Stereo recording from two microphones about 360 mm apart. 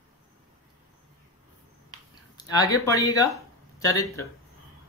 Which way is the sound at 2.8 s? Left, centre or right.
Centre.